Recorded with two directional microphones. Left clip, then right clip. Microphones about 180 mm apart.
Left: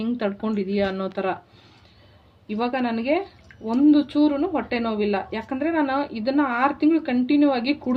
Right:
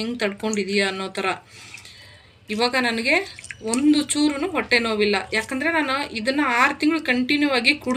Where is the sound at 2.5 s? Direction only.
40° left (ahead or behind).